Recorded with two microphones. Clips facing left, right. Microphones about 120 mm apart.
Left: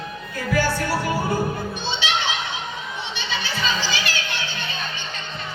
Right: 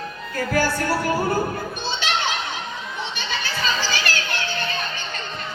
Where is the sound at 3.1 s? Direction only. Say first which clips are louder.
Left 3 dB; 45° right (ahead or behind).